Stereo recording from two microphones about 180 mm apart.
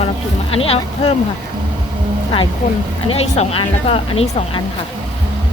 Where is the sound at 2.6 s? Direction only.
40° left (ahead or behind).